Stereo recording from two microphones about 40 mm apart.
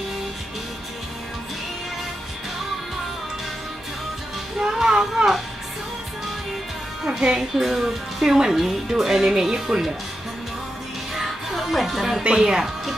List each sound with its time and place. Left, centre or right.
4.6 s music: centre
7.1 s speech: centre
11.1 s music: centre
12.4 s speech: centre